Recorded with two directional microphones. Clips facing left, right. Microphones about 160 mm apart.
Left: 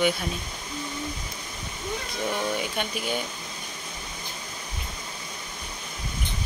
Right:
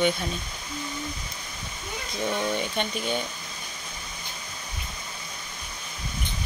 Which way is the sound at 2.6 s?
5° left (ahead or behind).